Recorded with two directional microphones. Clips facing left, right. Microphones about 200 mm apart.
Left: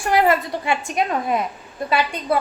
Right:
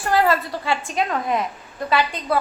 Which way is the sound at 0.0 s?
20° left (ahead or behind).